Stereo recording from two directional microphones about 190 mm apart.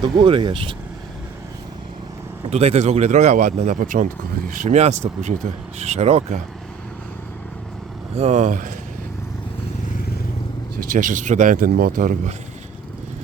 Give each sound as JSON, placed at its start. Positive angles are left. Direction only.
{"t": 0.0, "sound": "speech", "side_deg": -25}
{"t": 2.5, "sound": "speech", "side_deg": -35}
{"t": 8.1, "sound": "speech", "side_deg": -35}
{"t": 10.9, "sound": "speech", "side_deg": -40}